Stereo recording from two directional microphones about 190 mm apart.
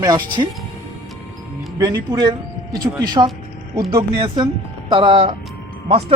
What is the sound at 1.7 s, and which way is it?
Speech, 15° right (ahead or behind).